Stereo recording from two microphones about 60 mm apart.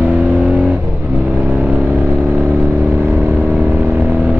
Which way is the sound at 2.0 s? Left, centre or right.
Right.